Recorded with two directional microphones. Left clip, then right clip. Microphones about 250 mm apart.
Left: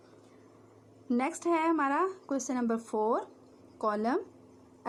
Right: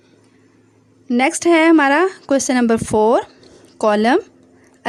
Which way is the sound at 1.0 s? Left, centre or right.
Right.